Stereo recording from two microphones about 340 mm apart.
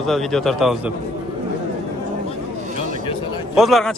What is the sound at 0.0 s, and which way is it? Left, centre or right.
Speech, centre.